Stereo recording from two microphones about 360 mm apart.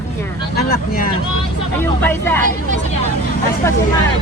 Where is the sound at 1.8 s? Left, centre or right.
Centre.